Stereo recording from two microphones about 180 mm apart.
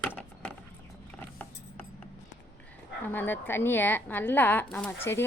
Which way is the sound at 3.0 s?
10° left (ahead or behind).